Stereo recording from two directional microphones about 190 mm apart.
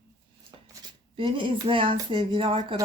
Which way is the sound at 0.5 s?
25° right (ahead or behind).